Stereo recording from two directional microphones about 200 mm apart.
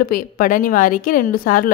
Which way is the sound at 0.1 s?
45° left (ahead or behind).